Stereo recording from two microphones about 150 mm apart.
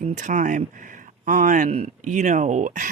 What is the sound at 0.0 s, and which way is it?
Speech, 55° right (ahead or behind).